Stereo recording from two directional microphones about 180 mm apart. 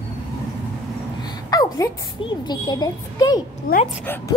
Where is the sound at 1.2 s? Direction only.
20° left (ahead or behind).